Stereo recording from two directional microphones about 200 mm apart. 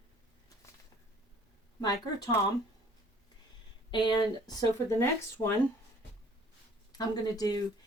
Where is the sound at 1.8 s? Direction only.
20° left (ahead or behind).